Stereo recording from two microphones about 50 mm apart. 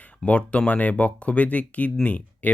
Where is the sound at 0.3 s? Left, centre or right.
Left.